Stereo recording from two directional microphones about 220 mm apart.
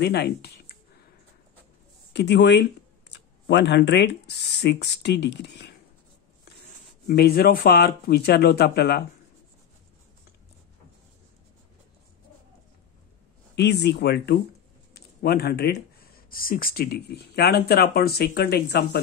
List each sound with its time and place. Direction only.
0.0 s speech: 45° left (ahead or behind)
2.1 s speech: 50° left (ahead or behind)
7.1 s speech: 45° left (ahead or behind)
13.6 s speech: 50° left (ahead or behind)